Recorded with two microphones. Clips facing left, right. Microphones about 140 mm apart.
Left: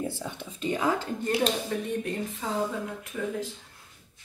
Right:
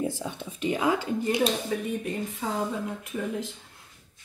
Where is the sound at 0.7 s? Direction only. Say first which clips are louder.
Right 2 dB; 10° right (ahead or behind).